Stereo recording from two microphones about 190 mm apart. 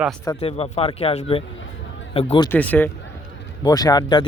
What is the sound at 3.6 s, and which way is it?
Speech, 20° left (ahead or behind).